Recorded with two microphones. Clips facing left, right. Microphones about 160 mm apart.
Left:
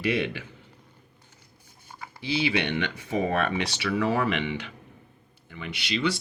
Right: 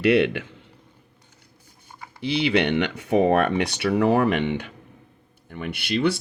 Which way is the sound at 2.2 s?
65° right (ahead or behind).